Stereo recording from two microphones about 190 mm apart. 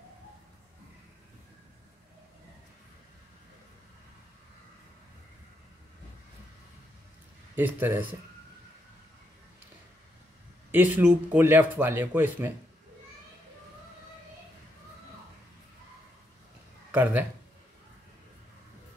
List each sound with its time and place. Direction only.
7.5 s speech: 10° right (ahead or behind)
10.7 s speech: 10° right (ahead or behind)
16.9 s speech: 10° right (ahead or behind)